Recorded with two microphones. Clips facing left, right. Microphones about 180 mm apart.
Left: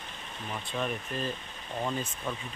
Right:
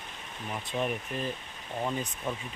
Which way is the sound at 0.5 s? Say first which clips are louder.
Right 2 dB; 15° right (ahead or behind).